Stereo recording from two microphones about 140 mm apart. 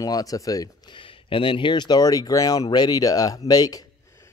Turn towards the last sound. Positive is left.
turn(degrees=30)  # may be behind; listen again after turning